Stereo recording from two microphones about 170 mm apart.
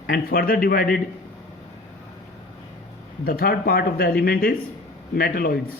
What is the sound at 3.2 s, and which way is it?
Speech, 65° left (ahead or behind).